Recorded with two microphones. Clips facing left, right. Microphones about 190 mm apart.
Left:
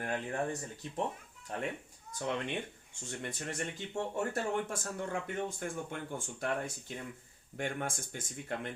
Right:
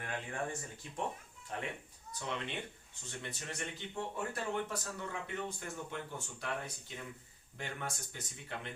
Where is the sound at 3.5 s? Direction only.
45° left (ahead or behind).